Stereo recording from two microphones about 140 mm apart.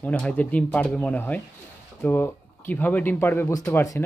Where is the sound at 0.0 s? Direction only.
10° left (ahead or behind).